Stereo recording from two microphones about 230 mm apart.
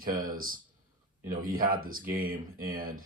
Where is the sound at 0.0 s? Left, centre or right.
Right.